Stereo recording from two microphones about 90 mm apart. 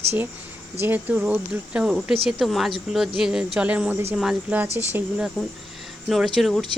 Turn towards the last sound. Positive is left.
turn(degrees=0)  # may be behind; listen again after turning